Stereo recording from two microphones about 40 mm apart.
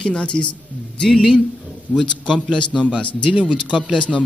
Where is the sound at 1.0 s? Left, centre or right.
Centre.